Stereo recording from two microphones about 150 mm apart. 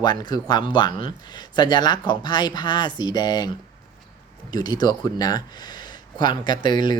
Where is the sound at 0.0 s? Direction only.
30° left (ahead or behind).